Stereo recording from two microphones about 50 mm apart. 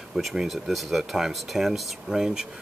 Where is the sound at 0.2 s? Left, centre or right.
Centre.